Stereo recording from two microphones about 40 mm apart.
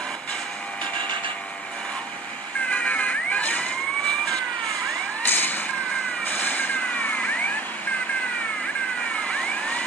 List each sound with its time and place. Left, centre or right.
2.7 s vehicle: left
5.2 s a sound: left
6.2 s vehicle: left
9.2 s vehicle: left